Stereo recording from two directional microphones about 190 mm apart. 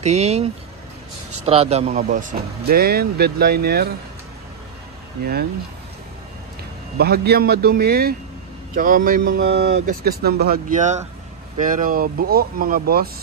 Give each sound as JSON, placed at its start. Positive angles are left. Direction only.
{"t": 0.0, "sound": "speech", "side_deg": -35}
{"t": 2.0, "sound": "speech", "side_deg": -45}
{"t": 5.2, "sound": "speech", "side_deg": -55}
{"t": 7.0, "sound": "speech", "side_deg": -55}